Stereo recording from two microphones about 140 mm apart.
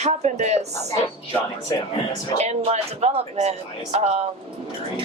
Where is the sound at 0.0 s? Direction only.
55° right (ahead or behind).